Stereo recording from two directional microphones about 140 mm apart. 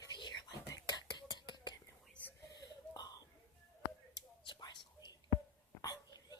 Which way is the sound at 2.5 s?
30° left (ahead or behind).